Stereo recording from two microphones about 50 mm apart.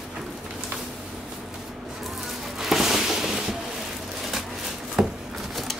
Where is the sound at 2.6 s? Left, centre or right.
Centre.